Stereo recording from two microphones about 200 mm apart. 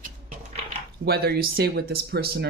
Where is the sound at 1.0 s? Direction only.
50° right (ahead or behind).